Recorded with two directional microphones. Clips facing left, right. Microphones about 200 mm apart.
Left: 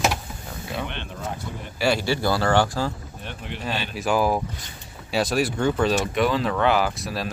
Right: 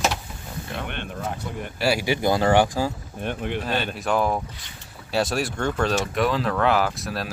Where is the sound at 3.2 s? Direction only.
55° right (ahead or behind).